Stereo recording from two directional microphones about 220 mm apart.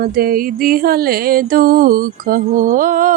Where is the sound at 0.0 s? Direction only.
40° right (ahead or behind).